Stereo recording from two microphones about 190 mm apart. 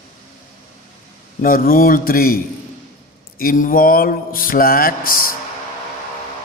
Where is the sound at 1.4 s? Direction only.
50° left (ahead or behind).